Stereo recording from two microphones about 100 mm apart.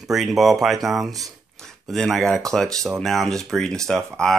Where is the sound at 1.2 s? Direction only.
Centre (ahead or behind).